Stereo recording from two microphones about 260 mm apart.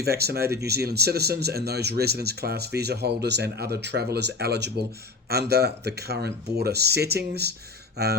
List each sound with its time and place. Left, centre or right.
0.2 s speech: right